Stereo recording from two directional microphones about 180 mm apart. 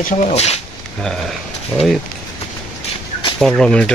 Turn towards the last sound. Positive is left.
turn(degrees=5)  # may be behind; listen again after turning